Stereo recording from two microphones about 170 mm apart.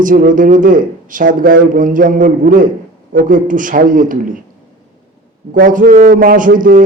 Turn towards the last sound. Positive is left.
turn(degrees=-55)  # may be behind; listen again after turning